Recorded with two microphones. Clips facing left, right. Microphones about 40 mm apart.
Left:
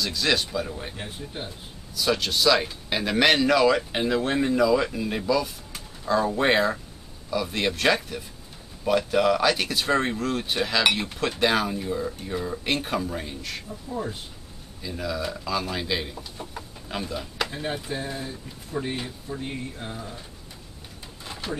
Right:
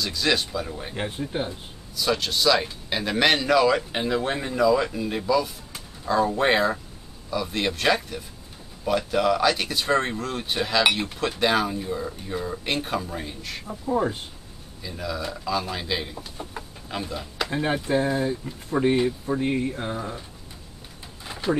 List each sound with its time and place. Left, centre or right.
0.0 s speech: centre
0.9 s speech: right
2.0 s speech: centre
13.7 s speech: right
14.8 s speech: centre
17.5 s speech: right
21.2 s a sound: centre